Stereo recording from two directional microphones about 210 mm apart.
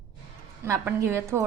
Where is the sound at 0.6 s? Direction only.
15° right (ahead or behind).